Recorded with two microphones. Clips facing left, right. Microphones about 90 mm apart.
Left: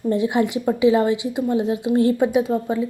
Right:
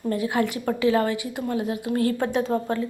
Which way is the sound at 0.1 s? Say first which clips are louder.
Left 4 dB; 20° left (ahead or behind).